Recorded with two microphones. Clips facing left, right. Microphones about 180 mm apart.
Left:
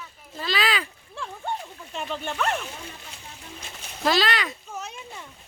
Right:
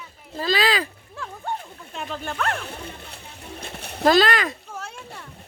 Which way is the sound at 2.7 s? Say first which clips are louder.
Right 4 dB; 60° right (ahead or behind).